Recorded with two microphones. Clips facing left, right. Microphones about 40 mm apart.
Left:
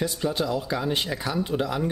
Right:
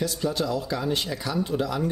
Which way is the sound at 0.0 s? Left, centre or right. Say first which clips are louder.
Even; left.